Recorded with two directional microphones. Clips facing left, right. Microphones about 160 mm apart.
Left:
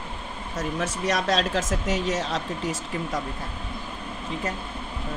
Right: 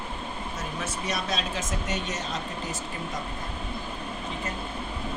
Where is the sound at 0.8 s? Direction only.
90° left.